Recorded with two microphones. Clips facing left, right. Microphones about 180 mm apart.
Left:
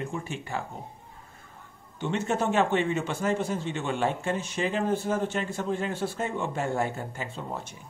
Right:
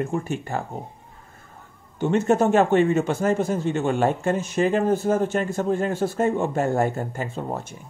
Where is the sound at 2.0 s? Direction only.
45° right (ahead or behind).